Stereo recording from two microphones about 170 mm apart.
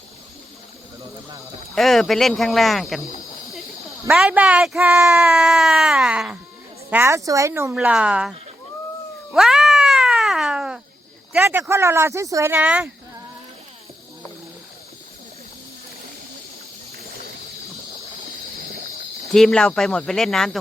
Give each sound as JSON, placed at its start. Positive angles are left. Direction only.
{"t": 1.7, "sound": "speech", "side_deg": 0}
{"t": 4.1, "sound": "speech", "side_deg": -5}
{"t": 5.3, "sound": "speech", "side_deg": 0}
{"t": 9.3, "sound": "cat", "side_deg": -5}
{"t": 11.3, "sound": "speech", "side_deg": -10}
{"t": 19.3, "sound": "speech", "side_deg": 5}